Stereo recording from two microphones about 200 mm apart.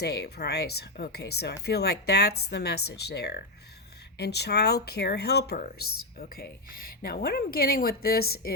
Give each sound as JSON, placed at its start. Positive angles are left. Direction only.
{"t": 0.0, "sound": "speech", "side_deg": 55}